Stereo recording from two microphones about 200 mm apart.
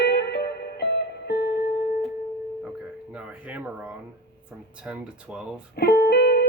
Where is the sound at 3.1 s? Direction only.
5° right (ahead or behind).